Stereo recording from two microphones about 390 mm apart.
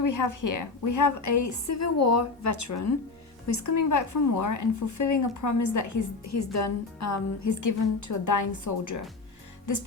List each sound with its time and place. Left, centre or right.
0.0 s a woman's voice: left